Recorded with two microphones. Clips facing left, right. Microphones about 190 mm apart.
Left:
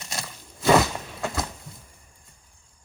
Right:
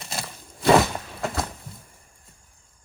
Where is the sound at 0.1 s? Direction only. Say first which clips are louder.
Right 2 dB; centre (ahead or behind).